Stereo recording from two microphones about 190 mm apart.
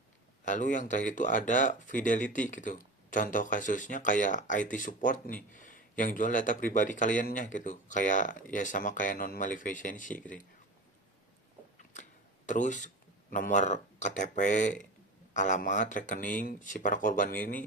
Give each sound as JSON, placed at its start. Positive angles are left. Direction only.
{"t": 0.4, "sound": "speech", "side_deg": 40}
{"t": 12.5, "sound": "speech", "side_deg": 40}